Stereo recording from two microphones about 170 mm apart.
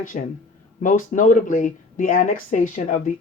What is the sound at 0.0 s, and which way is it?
Speech, 50° left (ahead or behind).